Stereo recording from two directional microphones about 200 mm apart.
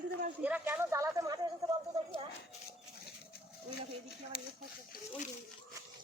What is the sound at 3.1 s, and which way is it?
Goat, 50° left (ahead or behind).